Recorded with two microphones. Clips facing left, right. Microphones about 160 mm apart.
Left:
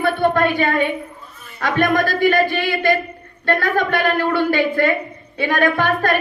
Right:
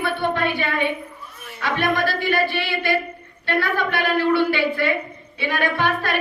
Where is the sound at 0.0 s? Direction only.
45° left (ahead or behind).